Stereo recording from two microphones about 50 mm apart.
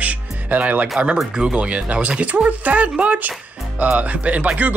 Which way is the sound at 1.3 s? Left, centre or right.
Right.